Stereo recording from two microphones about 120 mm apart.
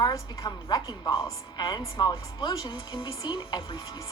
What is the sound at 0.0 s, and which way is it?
A woman's voice, 35° left (ahead or behind).